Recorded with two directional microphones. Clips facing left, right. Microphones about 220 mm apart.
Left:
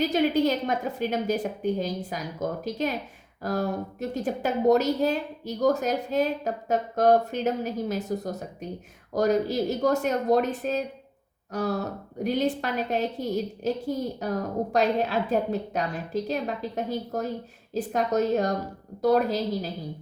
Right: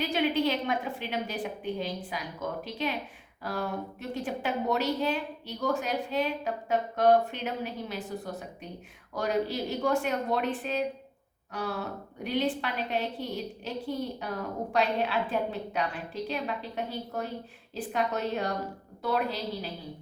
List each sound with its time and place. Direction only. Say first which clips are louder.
0.0 s a woman's voice: left 5 dB; 40° left (ahead or behind)